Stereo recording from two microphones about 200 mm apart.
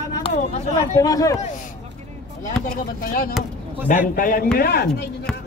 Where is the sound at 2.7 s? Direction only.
45° left (ahead or behind).